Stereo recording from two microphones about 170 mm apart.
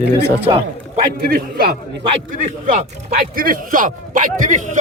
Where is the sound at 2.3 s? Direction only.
50° right (ahead or behind).